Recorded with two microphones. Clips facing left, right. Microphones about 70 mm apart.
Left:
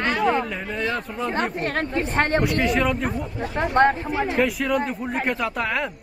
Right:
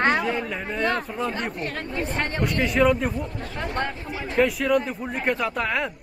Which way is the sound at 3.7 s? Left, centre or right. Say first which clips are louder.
Left 13 dB; left.